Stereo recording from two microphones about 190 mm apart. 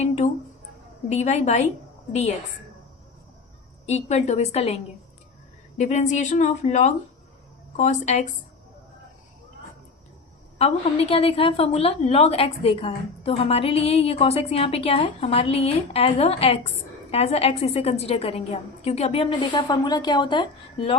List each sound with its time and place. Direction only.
1.1 s a woman's voice: 35° left (ahead or behind)
3.8 s a woman's voice: 35° left (ahead or behind)
10.6 s a woman's voice: 30° left (ahead or behind)